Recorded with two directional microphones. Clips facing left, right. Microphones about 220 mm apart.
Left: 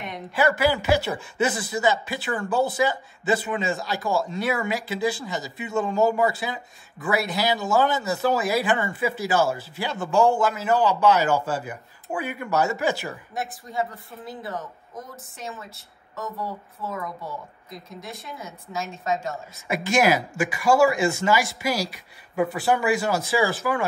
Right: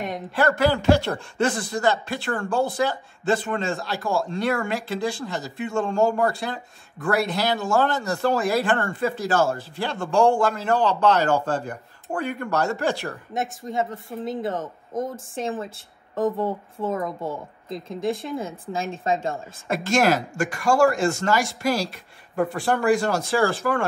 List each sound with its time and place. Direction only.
0.3 s a man's voice: 5° left (ahead or behind)
13.7 s a woman's voice: 20° right (ahead or behind)
14.6 s speech: 45° right (ahead or behind)
15.3 s a woman's voice: 30° right (ahead or behind)
16.9 s a woman's voice: 50° right (ahead or behind)
18.8 s a woman's voice: 30° right (ahead or behind)
19.7 s a man's voice: 5° left (ahead or behind)